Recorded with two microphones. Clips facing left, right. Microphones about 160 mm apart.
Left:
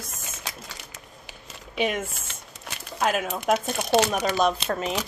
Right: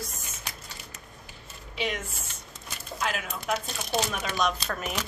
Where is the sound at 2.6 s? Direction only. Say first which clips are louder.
Left 6 dB; 60° left (ahead or behind).